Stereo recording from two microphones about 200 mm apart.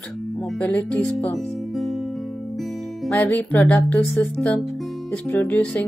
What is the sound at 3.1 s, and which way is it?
Speech, 10° left (ahead or behind).